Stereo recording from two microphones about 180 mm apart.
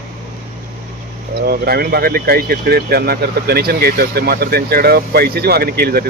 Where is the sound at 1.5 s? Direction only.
60° right (ahead or behind).